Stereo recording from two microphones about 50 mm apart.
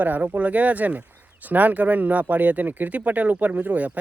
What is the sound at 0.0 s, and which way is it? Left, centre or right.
Speech, right.